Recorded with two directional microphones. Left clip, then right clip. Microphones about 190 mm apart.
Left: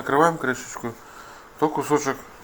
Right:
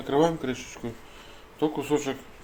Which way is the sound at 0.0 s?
Centre (ahead or behind).